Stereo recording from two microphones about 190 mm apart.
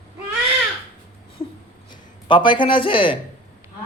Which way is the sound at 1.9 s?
25° left (ahead or behind).